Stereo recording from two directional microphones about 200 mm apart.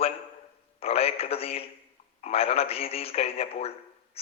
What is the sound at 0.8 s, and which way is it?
A man's voice, 30° left (ahead or behind).